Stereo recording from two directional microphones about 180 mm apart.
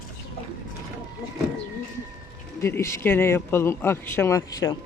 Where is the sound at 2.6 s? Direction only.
15° left (ahead or behind).